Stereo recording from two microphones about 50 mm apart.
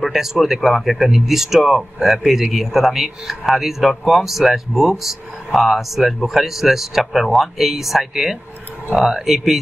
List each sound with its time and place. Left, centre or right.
0.0 s speech: centre